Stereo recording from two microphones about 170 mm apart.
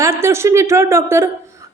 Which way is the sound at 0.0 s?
15° right (ahead or behind).